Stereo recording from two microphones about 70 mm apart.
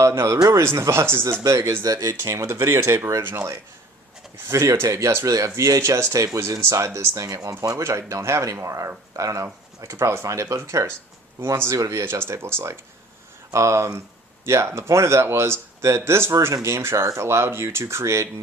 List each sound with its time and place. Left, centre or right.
0.0 s a man's voice: right
4.4 s speech: right